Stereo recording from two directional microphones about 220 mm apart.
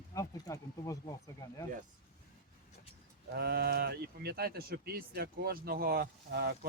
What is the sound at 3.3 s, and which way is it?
Speech, 45° right (ahead or behind).